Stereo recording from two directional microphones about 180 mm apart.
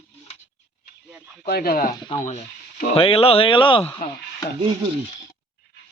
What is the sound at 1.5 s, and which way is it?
Speech, 55° left (ahead or behind).